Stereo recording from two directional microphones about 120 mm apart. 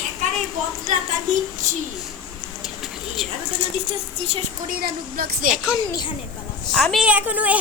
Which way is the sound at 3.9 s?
60° right (ahead or behind).